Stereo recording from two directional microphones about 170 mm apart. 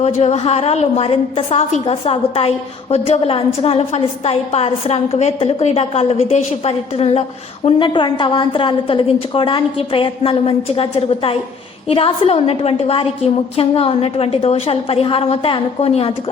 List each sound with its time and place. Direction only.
0.2 s a woman's voice: 35° left (ahead or behind)